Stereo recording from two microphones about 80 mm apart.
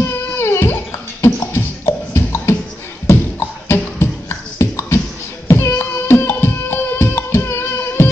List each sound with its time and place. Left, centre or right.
0.4 s a sound: left
1.2 s music: left
3.1 s beatboxing: left
5.5 s music: left